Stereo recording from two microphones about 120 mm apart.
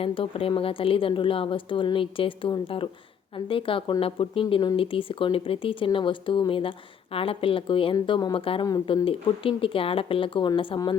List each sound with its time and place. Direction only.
0.0 s speech: 50° left (ahead or behind)